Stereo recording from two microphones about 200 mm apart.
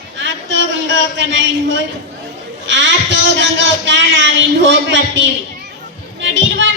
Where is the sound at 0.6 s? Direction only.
65° right (ahead or behind).